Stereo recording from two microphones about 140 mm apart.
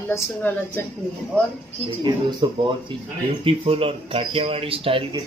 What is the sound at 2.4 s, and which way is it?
Speech, 35° right (ahead or behind).